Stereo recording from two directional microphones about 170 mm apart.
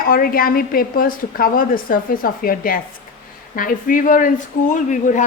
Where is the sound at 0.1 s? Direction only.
55° left (ahead or behind).